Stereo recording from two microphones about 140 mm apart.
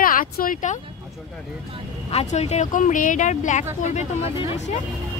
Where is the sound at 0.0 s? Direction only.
85° left; by 0.7 s 70° left (ahead or behind).